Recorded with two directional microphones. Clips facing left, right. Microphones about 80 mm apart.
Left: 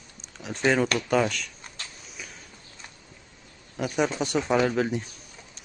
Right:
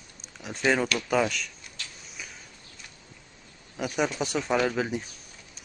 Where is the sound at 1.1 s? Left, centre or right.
Centre.